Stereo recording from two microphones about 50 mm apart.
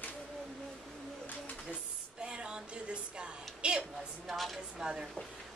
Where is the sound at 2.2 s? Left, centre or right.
Centre.